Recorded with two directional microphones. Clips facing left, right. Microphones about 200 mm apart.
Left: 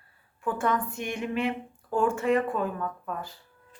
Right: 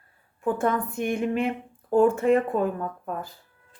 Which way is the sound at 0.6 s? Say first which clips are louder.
Right 1 dB; 50° right (ahead or behind).